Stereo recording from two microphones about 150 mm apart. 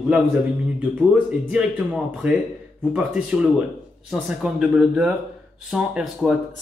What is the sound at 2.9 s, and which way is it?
A man's voice, 5° right (ahead or behind).